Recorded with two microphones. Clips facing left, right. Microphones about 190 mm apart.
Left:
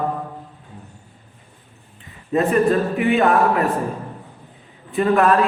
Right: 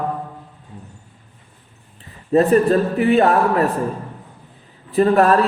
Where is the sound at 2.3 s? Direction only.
35° right (ahead or behind).